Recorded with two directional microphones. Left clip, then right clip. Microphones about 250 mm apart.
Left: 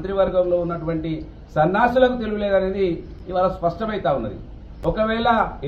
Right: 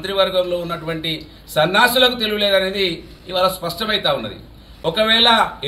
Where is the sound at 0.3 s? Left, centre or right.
Right.